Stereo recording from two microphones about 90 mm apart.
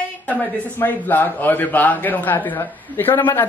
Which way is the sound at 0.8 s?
20° left (ahead or behind).